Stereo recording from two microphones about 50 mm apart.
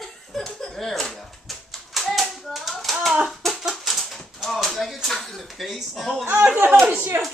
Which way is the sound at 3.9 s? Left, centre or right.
Centre.